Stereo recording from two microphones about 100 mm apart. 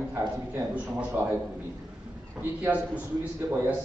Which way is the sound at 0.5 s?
15° right (ahead or behind).